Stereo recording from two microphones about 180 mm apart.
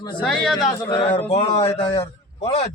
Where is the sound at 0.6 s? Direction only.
25° left (ahead or behind).